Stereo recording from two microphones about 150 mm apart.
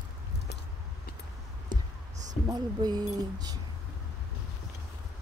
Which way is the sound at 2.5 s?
30° right (ahead or behind).